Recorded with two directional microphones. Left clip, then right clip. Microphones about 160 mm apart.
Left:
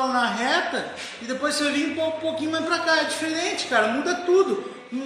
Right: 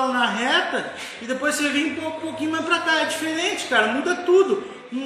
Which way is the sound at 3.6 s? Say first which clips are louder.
Right 1 dB; 20° left (ahead or behind).